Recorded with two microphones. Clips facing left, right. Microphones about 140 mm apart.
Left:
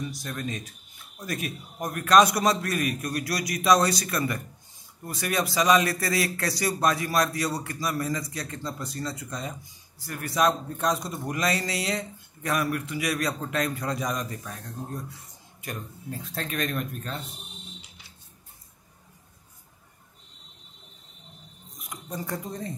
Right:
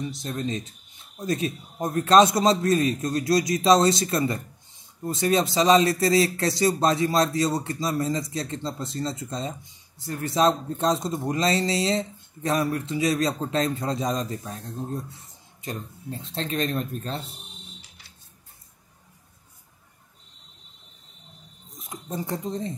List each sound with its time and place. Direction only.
0.0 s speech: 25° right (ahead or behind)
21.7 s speech: 25° right (ahead or behind)